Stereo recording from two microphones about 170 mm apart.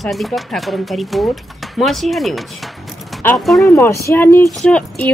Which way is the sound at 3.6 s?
15° left (ahead or behind).